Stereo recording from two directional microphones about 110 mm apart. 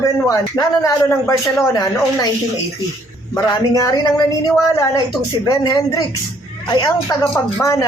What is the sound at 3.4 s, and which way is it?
A woman's voice, 35° left (ahead or behind).